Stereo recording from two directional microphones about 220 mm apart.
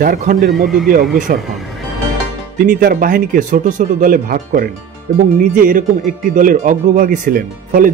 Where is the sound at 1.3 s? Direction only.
40° right (ahead or behind).